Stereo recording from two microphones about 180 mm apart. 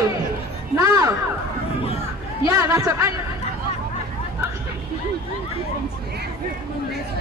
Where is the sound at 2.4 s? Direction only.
20° right (ahead or behind).